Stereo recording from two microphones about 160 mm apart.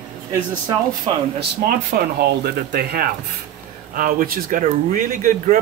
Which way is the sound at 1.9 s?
70° right (ahead or behind).